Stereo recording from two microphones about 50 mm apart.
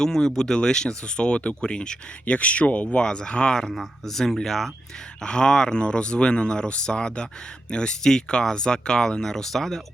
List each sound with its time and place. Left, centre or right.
0.0 s speech: centre